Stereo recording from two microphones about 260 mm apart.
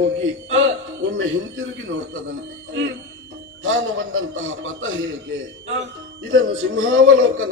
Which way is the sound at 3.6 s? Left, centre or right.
Right.